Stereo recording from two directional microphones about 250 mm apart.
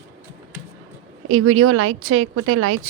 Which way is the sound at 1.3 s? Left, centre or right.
Right.